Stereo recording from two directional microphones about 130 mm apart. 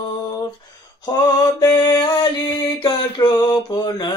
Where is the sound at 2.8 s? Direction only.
30° left (ahead or behind).